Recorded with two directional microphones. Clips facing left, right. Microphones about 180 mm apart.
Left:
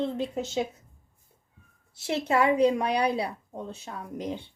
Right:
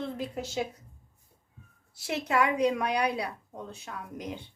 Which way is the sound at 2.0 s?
25° left (ahead or behind).